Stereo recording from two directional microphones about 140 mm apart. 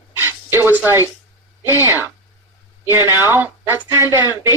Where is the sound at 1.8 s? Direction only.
20° right (ahead or behind).